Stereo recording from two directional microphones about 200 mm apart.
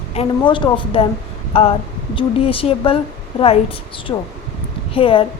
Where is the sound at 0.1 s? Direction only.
25° left (ahead or behind).